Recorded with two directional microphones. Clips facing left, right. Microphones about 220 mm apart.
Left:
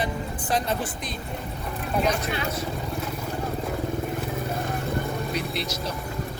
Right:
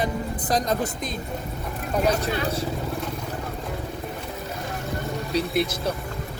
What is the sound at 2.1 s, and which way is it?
Speech, 35° right (ahead or behind).